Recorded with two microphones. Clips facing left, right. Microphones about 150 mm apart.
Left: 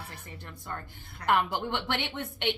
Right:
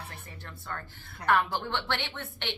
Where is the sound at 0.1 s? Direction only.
15° left (ahead or behind).